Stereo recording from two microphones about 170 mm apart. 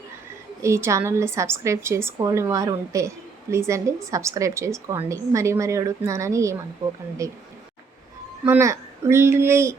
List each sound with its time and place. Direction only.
0.6 s a woman's voice: 15° right (ahead or behind)
8.4 s a woman's voice: 15° right (ahead or behind)